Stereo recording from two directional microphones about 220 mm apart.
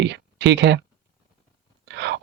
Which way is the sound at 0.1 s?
55° right (ahead or behind).